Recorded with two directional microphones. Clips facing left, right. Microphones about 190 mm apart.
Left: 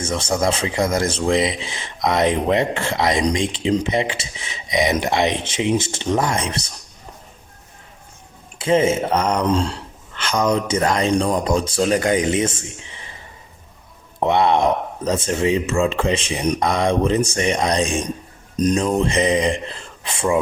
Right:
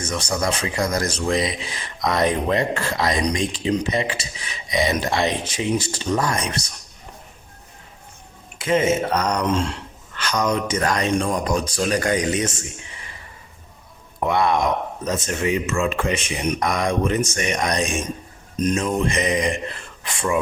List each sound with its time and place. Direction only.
0.0 s speech: 25° left (ahead or behind)
8.5 s speech: 30° left (ahead or behind)
14.2 s speech: 25° left (ahead or behind)